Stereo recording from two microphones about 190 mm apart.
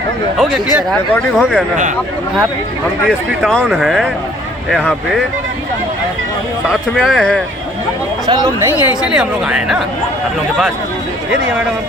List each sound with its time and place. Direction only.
0.3 s speech: centre (ahead or behind)
3.1 s speech: centre (ahead or behind)
6.7 s speech: centre (ahead or behind)
8.3 s speech: 20° right (ahead or behind)
9.1 s speech: 5° right (ahead or behind)